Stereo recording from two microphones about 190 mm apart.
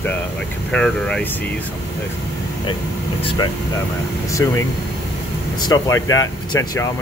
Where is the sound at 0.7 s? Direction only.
5° left (ahead or behind).